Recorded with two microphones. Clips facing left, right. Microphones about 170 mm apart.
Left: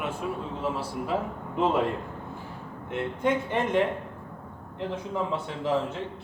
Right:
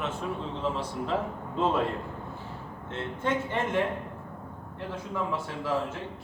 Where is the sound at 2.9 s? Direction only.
15° left (ahead or behind).